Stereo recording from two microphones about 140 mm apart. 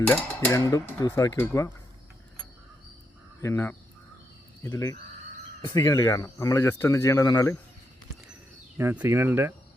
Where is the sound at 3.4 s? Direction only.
20° left (ahead or behind).